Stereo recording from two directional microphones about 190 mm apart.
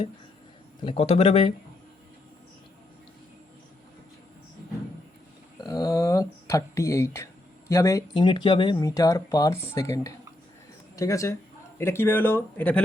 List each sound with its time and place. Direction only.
0.9 s speech: 30° left (ahead or behind)
5.5 s speech: 20° left (ahead or behind)